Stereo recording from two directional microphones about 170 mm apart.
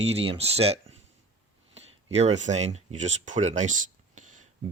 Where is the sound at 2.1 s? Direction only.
40° right (ahead or behind).